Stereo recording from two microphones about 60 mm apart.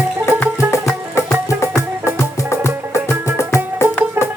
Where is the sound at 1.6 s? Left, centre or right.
Left.